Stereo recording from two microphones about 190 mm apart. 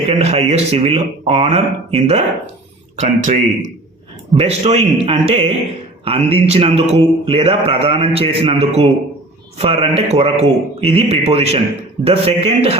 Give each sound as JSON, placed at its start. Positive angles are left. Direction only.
{"t": 0.1, "sound": "mantra", "side_deg": -35}